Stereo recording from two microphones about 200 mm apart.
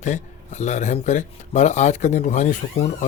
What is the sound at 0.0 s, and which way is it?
Speech, 35° left (ahead or behind).